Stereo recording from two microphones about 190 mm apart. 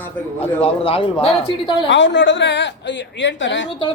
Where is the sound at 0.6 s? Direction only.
30° left (ahead or behind).